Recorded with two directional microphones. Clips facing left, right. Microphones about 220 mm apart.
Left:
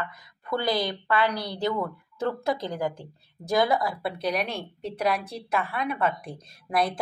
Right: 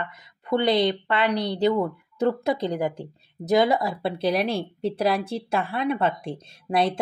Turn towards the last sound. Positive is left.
turn(degrees=-25)  # may be behind; listen again after turning